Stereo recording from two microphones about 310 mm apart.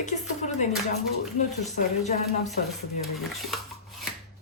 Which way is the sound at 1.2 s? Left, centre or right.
Centre.